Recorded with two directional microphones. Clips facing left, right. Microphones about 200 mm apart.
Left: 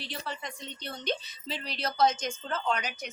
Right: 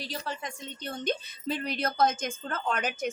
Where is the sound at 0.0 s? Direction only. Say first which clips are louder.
Right 2 dB; 40° right (ahead or behind).